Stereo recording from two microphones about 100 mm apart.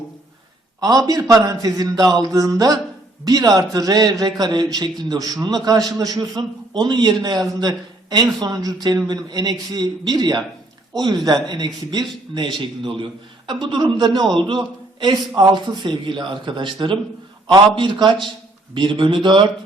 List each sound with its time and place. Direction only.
0.8 s a man's voice: 40° right (ahead or behind)